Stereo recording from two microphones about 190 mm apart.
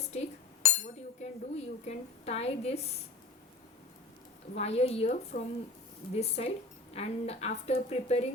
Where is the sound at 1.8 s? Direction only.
35° left (ahead or behind).